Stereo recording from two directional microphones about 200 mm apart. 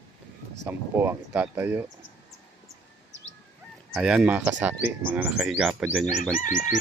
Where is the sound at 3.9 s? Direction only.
Centre (ahead or behind).